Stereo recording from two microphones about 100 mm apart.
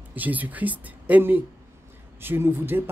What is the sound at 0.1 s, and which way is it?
Speech, 15° right (ahead or behind).